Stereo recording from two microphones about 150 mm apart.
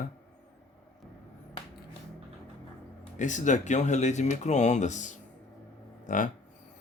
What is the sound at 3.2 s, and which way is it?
A man's voice, 55° left (ahead or behind).